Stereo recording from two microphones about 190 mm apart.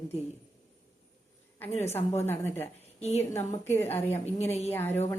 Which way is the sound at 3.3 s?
10° left (ahead or behind).